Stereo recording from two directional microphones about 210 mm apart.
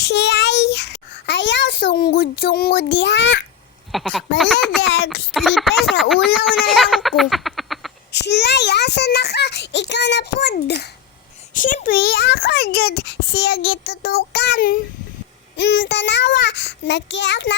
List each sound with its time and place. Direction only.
0.0 s a child's voice: 55° left (ahead or behind)
3.9 s speech: centre (ahead or behind)
5.3 s speech: centre (ahead or behind)
6.3 s a sound: centre (ahead or behind)
8.1 s a child's voice: 55° left (ahead or behind)
11.5 s a child's voice: 40° left (ahead or behind)
15.5 s a child's voice: 60° left (ahead or behind)